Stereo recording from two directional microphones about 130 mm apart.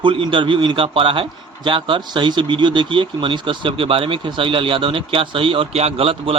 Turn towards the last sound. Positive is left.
turn(degrees=-45)  # may be behind; listen again after turning